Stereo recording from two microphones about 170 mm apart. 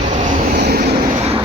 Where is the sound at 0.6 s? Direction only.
65° right (ahead or behind).